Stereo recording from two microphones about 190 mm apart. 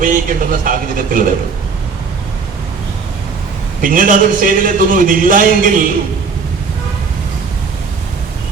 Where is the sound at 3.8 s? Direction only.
45° right (ahead or behind).